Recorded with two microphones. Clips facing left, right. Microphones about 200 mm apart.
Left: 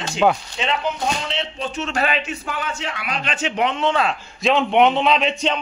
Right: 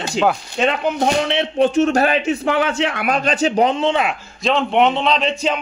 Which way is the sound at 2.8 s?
50° right (ahead or behind).